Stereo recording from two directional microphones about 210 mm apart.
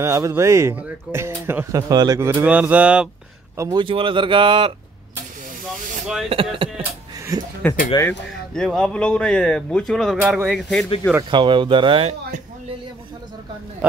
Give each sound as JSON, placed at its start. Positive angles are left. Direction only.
{"t": 0.0, "sound": "speech", "side_deg": -15}
{"t": 3.5, "sound": "speech", "side_deg": -15}
{"t": 6.2, "sound": "speech", "side_deg": -25}
{"t": 7.3, "sound": "a sound", "side_deg": -20}
{"t": 7.9, "sound": "speech", "side_deg": 20}
{"t": 8.5, "sound": "speech", "side_deg": 5}
{"t": 11.2, "sound": "speech", "side_deg": -20}